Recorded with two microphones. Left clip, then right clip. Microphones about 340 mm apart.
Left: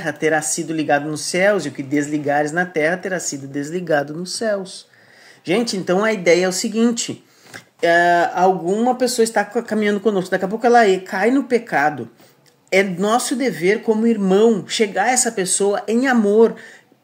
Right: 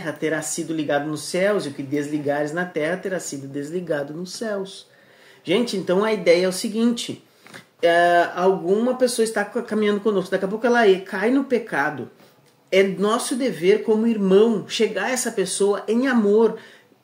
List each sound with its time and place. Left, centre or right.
0.0 s speech: left